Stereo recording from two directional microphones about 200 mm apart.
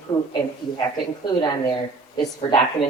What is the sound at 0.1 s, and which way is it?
Speech, 25° left (ahead or behind).